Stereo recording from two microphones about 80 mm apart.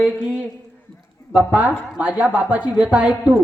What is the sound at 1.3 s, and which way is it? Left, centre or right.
Speech, right.